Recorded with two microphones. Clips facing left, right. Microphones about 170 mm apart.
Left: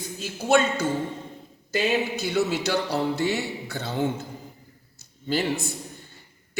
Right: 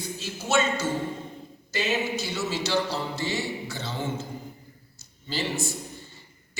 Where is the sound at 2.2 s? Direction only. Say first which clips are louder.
Left 5 dB; 60° left (ahead or behind).